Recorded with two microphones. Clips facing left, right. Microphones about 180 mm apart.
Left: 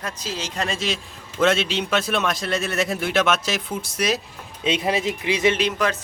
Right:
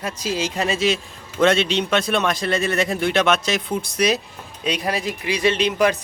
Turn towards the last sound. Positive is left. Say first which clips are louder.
# right 2 dB
turn(degrees=5)  # may be behind; listen again after turning